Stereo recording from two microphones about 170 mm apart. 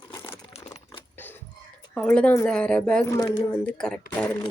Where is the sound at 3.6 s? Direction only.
5° left (ahead or behind).